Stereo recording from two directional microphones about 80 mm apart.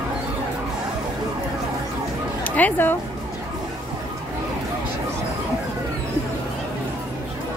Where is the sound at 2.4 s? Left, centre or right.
Centre.